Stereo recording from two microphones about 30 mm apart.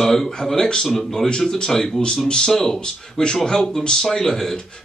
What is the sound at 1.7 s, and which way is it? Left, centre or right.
Speech, centre.